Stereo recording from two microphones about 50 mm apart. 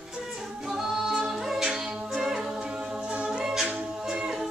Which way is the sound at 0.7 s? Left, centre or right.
Centre.